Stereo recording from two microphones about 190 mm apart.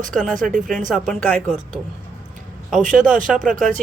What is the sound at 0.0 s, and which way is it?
Speech, 45° right (ahead or behind).